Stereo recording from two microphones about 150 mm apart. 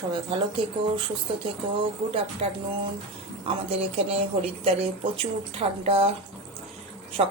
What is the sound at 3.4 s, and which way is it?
Speech, 40° right (ahead or behind).